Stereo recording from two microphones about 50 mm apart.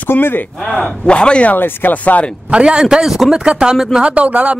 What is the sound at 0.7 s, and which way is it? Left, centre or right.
Speech, centre.